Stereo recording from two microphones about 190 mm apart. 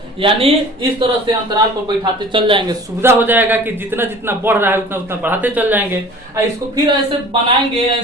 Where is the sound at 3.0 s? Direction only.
10° right (ahead or behind).